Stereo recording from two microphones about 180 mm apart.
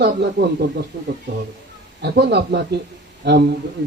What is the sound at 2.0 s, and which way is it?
Speech, 70° right (ahead or behind).